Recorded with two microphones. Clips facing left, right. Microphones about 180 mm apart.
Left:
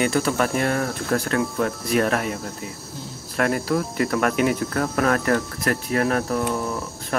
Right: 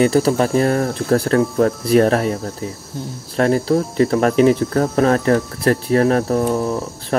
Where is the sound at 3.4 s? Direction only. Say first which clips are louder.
Right 6 dB; 30° right (ahead or behind).